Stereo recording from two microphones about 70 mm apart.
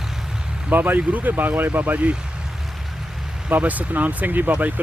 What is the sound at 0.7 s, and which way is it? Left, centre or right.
Speech, right.